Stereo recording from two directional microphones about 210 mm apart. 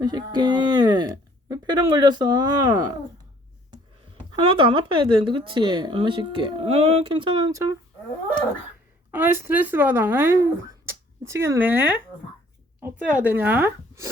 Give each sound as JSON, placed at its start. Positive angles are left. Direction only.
{"t": 0.0, "sound": "speech", "side_deg": -20}
{"t": 4.5, "sound": "speech", "side_deg": -25}
{"t": 9.1, "sound": "a woman's voice", "side_deg": -10}